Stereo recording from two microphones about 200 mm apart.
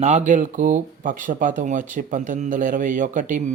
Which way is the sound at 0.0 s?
35° right (ahead or behind).